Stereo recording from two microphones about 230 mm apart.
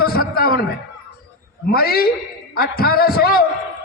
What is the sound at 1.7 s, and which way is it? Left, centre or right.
A man's voice, left.